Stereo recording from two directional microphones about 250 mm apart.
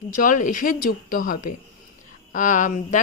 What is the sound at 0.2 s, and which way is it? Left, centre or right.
Speech, left.